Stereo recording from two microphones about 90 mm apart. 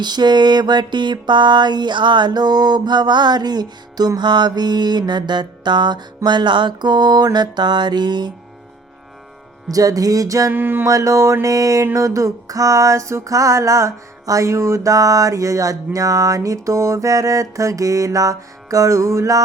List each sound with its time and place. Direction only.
0.0 s a sound: 55° right (ahead or behind)
9.6 s music: 40° right (ahead or behind)
10.5 s music: 25° right (ahead or behind)
10.8 s music: 35° right (ahead or behind)